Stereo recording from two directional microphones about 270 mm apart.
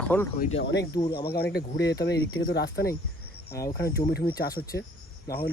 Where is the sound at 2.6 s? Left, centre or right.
Left.